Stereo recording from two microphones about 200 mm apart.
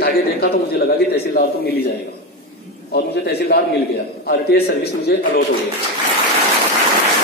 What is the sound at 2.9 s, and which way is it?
A man's voice, 50° left (ahead or behind).